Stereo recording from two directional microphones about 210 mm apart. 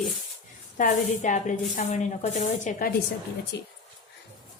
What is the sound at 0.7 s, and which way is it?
Speech, 40° left (ahead or behind).